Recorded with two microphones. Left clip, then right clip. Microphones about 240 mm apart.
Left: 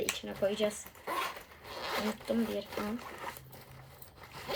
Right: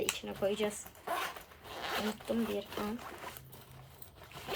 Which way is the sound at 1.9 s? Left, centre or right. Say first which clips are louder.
Left 2 dB; centre.